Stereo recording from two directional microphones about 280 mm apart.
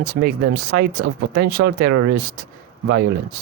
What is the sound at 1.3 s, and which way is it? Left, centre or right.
Speech, right.